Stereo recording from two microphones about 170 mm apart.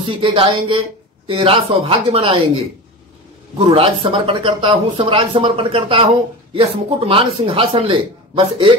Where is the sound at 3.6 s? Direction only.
35° right (ahead or behind).